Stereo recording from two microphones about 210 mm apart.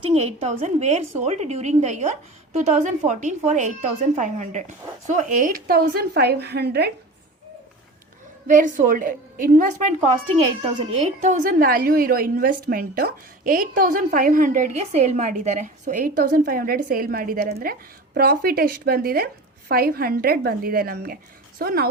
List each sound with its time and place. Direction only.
0.0 s a woman's voice: 30° right (ahead or behind); by 6.9 s 50° right (ahead or behind)
8.4 s a woman's voice: 40° right (ahead or behind)
10.6 s speech: 30° right (ahead or behind); by 21.8 s 45° right (ahead or behind)